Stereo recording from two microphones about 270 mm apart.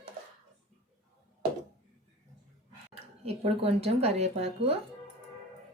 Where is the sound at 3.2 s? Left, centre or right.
Right.